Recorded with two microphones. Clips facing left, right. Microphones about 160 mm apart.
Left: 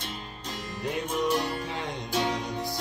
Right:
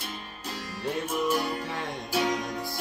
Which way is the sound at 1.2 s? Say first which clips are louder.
Even; 10° right (ahead or behind).